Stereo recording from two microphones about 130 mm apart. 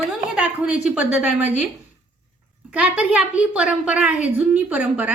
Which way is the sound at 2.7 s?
10° right (ahead or behind).